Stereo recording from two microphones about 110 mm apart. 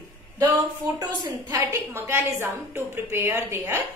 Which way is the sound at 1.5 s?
25° right (ahead or behind).